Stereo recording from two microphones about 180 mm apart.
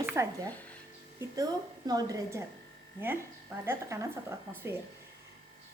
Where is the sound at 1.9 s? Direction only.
20° right (ahead or behind).